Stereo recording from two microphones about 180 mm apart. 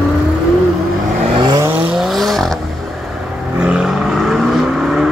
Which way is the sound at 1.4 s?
20° right (ahead or behind).